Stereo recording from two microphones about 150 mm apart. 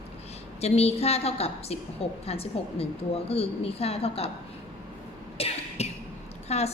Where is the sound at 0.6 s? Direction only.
45° left (ahead or behind).